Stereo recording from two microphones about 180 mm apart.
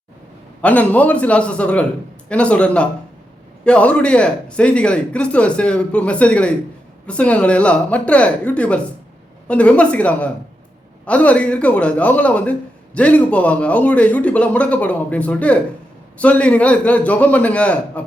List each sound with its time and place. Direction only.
0.6 s speech: 10° left (ahead or behind)